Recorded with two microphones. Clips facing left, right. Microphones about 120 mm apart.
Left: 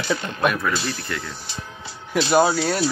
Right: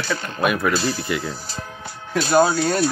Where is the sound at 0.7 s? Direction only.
40° right (ahead or behind).